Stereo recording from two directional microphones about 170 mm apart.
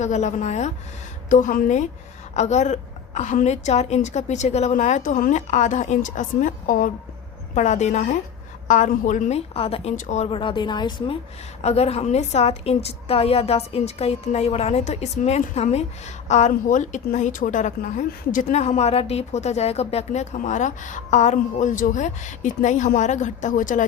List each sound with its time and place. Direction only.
0.0 s a woman's voice: 45° left (ahead or behind)
10.2 s a woman's voice: 30° left (ahead or behind); by 23.8 s 50° left (ahead or behind)